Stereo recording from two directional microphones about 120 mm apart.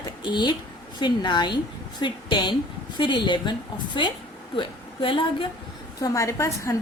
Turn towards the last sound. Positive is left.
turn(degrees=25)  # may be behind; listen again after turning